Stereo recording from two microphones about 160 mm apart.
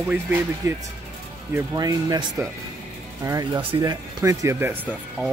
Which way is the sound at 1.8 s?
25° right (ahead or behind).